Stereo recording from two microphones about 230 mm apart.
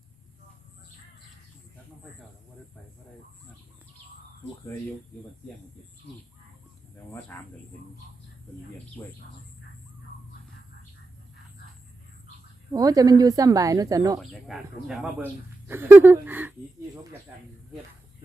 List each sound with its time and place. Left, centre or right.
9.0 s speech: centre
12.7 s speech: centre
14.2 s speech: centre